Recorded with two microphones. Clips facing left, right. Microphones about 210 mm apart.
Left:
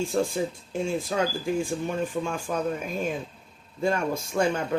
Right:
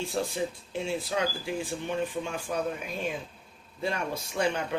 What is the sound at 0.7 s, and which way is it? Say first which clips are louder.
Speech: left 3 dB; 45° left (ahead or behind).